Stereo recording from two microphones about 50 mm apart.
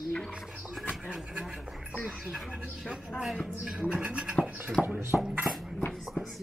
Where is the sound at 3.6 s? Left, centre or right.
Centre.